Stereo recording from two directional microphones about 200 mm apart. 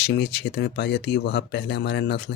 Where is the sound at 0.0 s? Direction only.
55° left (ahead or behind).